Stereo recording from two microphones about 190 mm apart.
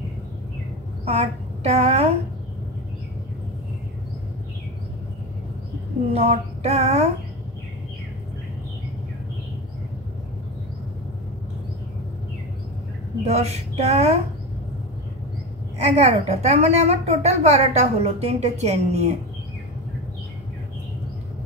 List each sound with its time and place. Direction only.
1.0 s a woman's voice: 35° right (ahead or behind)
6.1 s a woman's voice: 35° right (ahead or behind)
13.2 s a woman's voice: 35° right (ahead or behind)
15.8 s a woman's voice: 35° right (ahead or behind)